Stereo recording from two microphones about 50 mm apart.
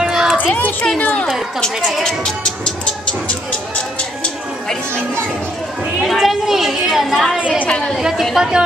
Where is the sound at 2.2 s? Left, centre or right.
Centre.